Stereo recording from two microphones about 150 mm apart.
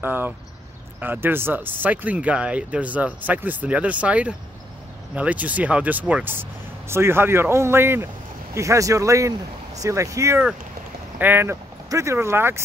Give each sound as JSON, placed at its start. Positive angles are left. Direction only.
{"t": 0.0, "sound": "speech", "side_deg": -15}